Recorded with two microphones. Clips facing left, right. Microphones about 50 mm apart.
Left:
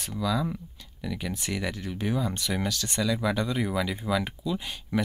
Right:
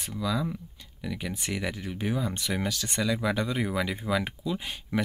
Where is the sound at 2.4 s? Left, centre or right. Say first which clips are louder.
Left 1 dB; right.